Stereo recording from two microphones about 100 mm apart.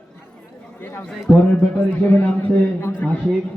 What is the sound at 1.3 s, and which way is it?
A man's voice, 10° left (ahead or behind).